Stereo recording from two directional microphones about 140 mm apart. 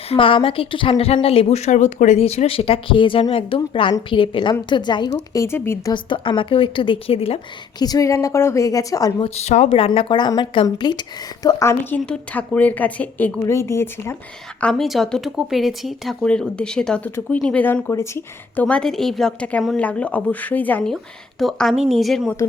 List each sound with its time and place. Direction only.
0.1 s a woman's voice: 40° left (ahead or behind)
5.3 s a woman's voice: 20° left (ahead or behind)
5.9 s a woman's voice: 35° left (ahead or behind)
7.8 s a woman's voice: 25° left (ahead or behind)
9.2 s a woman's voice: 50° left (ahead or behind); by 11.0 s 30° left (ahead or behind)
11.4 s a woman's voice: 20° left (ahead or behind)
14.6 s a woman's voice: 5° left (ahead or behind); by 18.6 s 20° left (ahead or behind)
18.6 s a woman's voice: 5° left (ahead or behind)